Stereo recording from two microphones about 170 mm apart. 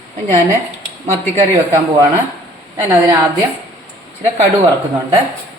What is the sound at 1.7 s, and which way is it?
Speech, 20° right (ahead or behind).